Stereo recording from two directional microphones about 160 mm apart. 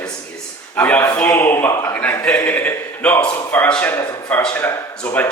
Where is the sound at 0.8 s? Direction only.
10° left (ahead or behind).